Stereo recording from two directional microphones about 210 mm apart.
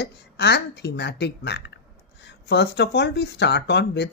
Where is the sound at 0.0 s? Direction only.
55° left (ahead or behind).